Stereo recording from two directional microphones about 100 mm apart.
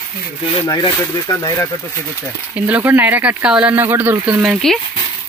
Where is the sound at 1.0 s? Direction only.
30° left (ahead or behind).